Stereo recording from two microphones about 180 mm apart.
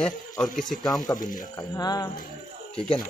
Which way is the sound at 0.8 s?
20° left (ahead or behind).